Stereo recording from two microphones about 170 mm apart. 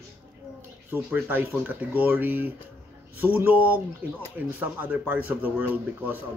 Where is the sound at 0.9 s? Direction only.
10° right (ahead or behind).